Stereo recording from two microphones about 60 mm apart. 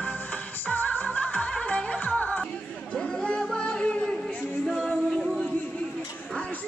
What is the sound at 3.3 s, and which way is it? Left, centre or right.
Music, centre.